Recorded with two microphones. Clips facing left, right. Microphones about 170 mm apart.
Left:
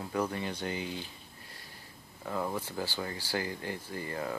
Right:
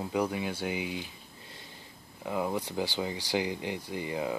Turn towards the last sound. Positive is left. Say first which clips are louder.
# right 4 dB
turn(degrees=-15)  # may be behind; listen again after turning